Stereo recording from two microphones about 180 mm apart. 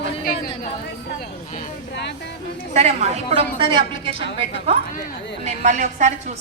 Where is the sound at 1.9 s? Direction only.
70° left (ahead or behind).